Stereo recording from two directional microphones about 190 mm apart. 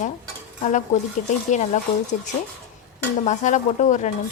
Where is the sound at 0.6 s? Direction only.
40° left (ahead or behind).